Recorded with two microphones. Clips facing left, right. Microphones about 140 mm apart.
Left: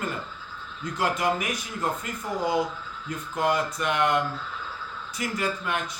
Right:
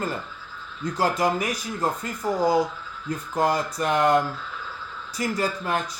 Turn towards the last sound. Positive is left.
turn(degrees=-35)  # may be behind; listen again after turning